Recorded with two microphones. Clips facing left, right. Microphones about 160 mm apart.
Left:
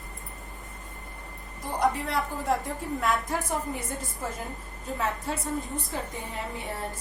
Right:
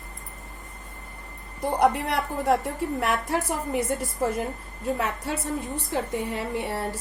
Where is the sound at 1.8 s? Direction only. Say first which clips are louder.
Right 3 dB; 65° right (ahead or behind).